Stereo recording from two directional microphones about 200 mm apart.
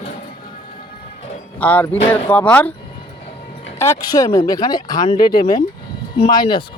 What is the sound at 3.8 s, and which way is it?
Speech, 15° left (ahead or behind).